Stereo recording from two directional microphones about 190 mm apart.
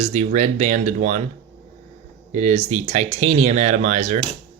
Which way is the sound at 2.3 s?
40° right (ahead or behind).